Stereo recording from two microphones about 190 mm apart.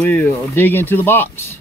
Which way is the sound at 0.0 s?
15° left (ahead or behind).